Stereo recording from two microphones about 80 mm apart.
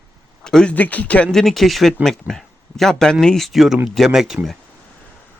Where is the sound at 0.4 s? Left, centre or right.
Centre.